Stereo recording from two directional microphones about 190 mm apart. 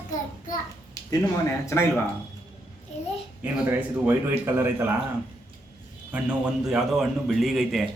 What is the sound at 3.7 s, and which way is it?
A man's voice, 10° right (ahead or behind).